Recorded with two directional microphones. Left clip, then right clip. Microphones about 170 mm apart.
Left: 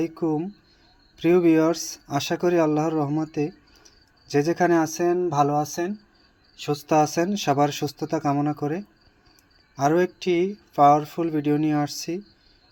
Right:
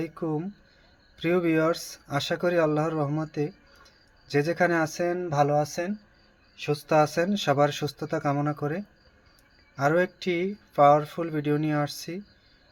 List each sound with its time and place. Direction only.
0.0 s speech: 15° left (ahead or behind)